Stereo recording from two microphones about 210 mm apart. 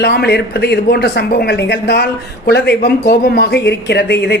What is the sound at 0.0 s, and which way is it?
Speech, 50° left (ahead or behind).